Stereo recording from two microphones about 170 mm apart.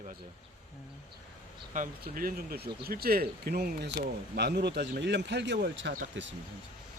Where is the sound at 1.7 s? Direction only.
55° right (ahead or behind); by 6.3 s 90° right.